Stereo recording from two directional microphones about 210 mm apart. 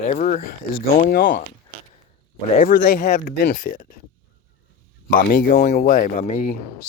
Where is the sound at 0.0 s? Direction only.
35° left (ahead or behind).